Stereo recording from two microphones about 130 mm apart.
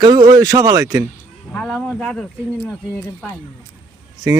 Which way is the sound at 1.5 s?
5° left (ahead or behind).